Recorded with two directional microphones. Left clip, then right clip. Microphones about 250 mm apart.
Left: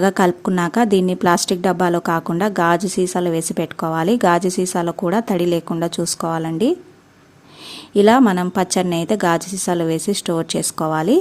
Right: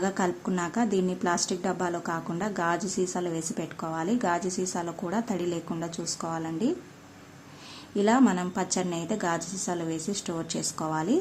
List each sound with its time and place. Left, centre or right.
0.0 s a woman's voice: left
7.9 s a woman's voice: left